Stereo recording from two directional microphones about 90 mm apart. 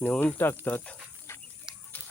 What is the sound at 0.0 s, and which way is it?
Speech, 20° left (ahead or behind).